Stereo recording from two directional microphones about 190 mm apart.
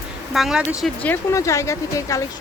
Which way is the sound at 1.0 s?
15° left (ahead or behind).